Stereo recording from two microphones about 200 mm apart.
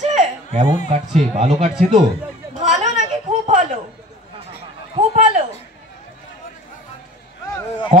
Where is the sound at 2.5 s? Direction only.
35° right (ahead or behind).